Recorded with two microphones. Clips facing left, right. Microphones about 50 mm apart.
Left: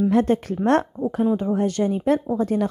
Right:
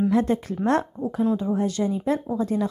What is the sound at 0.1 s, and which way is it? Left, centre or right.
Speech, left.